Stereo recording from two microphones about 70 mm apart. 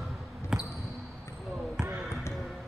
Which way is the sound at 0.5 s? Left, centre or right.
Centre.